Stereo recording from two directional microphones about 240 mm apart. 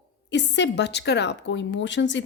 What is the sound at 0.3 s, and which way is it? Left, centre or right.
A woman's voice, left.